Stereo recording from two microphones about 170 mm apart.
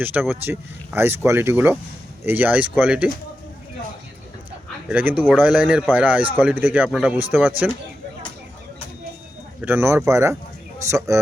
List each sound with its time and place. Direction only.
0.0 s speech: 10° right (ahead or behind)
4.9 s speech: 10° right (ahead or behind)
9.6 s speech: 10° right (ahead or behind)